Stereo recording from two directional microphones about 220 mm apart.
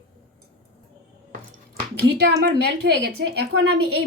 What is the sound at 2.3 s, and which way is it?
A woman's voice, 50° right (ahead or behind).